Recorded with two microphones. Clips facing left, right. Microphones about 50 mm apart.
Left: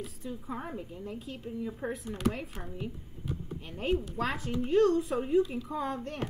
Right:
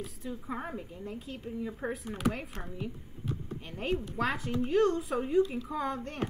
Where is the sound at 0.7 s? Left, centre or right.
Centre.